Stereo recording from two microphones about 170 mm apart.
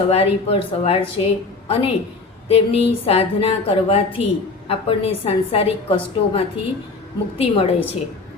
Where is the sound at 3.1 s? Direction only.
35° left (ahead or behind).